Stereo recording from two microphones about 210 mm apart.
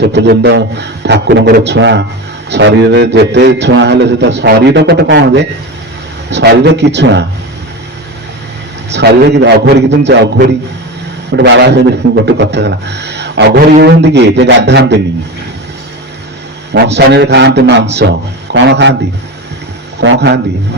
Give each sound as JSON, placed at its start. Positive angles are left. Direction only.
{"t": 0.0, "sound": "speech", "side_deg": -55}
{"t": 8.9, "sound": "a man's voice", "side_deg": -55}
{"t": 16.7, "sound": "a man's voice", "side_deg": -55}
{"t": 20.0, "sound": "speech", "side_deg": -55}